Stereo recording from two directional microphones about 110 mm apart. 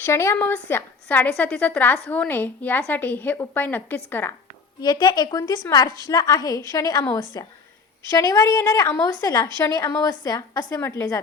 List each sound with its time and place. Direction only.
0.0 s a woman's voice: 25° left (ahead or behind)
4.8 s a woman's voice: 40° left (ahead or behind)
10.8 s a woman's voice: 25° left (ahead or behind)